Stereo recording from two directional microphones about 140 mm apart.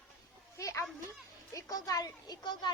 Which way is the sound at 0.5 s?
25° left (ahead or behind).